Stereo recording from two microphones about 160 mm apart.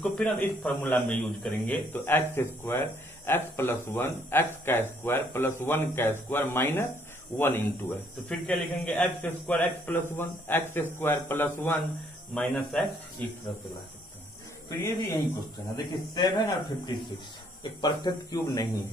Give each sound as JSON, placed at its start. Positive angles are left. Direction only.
{"t": 0.0, "sound": "a man's voice", "side_deg": 5}
{"t": 12.4, "sound": "speech", "side_deg": 5}
{"t": 14.8, "sound": "a man's voice", "side_deg": 15}